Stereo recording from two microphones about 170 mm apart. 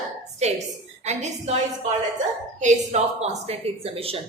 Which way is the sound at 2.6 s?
45° right (ahead or behind).